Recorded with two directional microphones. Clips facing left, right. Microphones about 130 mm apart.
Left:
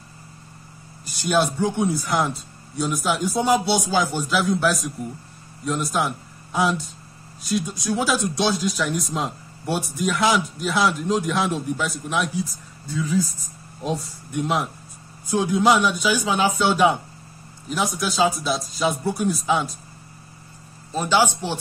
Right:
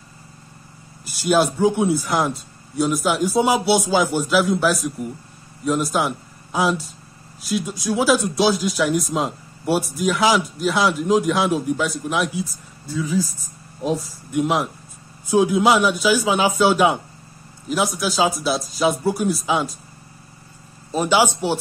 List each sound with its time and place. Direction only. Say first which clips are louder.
1.2 s speech: right 4 dB; 5° right (ahead or behind)
20.9 s speech: right 2 dB; 15° right (ahead or behind)